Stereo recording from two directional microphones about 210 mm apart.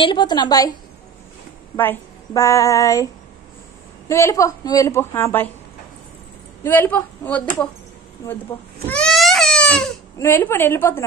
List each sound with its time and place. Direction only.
0.0 s a woman's voice: 20° left (ahead or behind)
1.8 s a woman's voice: 10° left (ahead or behind)
4.1 s a woman's voice: 15° left (ahead or behind)
6.6 s a woman's voice: 10° left (ahead or behind)
8.8 s baby cry: 5° left (ahead or behind)
10.1 s a woman's voice: 10° left (ahead or behind)